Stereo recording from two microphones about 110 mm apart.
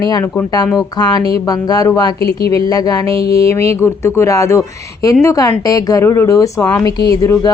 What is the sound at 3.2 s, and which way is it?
Speech, 65° right (ahead or behind).